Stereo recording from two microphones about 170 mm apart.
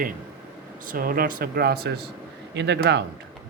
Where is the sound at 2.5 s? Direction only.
90° right.